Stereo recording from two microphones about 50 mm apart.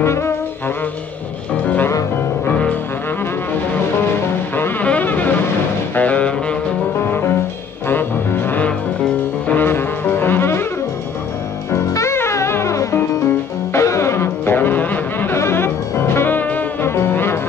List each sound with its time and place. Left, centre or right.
0.0 s brass instrument: left
5.0 s vehicle: left
5.9 s music: left
7.9 s music: left
9.6 s music: left
11.7 s music: left
15.3 s music: left
16.3 s music: left
16.8 s music: left